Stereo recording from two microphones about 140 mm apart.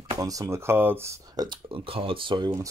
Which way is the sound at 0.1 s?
25° right (ahead or behind).